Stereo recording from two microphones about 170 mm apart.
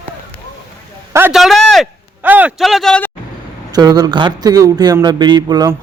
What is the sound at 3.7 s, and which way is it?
Speech, 20° right (ahead or behind).